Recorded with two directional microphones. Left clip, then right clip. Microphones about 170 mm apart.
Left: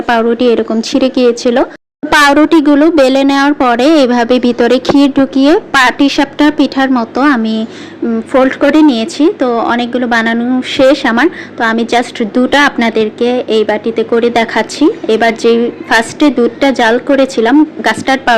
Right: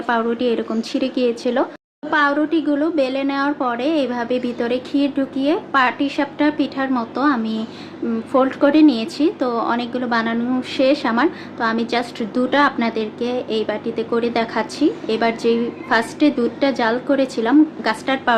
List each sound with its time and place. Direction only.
0.1 s speech: 30° left (ahead or behind)
2.0 s a woman's voice: 50° left (ahead or behind); by 18.3 s 30° left (ahead or behind)